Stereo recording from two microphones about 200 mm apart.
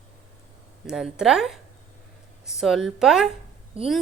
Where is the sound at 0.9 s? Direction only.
5° right (ahead or behind).